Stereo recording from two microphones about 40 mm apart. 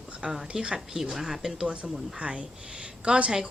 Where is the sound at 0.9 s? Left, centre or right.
Centre.